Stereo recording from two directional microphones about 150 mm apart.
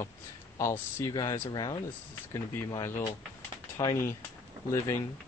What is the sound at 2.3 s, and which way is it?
Speech, 20° left (ahead or behind).